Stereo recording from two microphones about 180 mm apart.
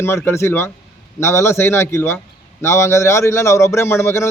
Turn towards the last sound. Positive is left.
turn(degrees=15)  # may be behind; listen again after turning